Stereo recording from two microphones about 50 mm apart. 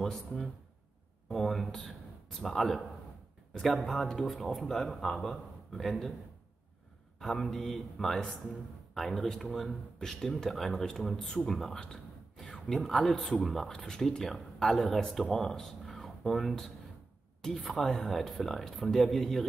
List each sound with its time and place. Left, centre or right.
0.0 s speech: centre
3.8 s speech: centre
7.2 s speech: centre
12.4 s a sound: centre
13.0 s speech: centre